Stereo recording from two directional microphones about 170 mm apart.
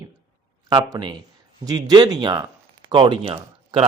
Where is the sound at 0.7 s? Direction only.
25° right (ahead or behind).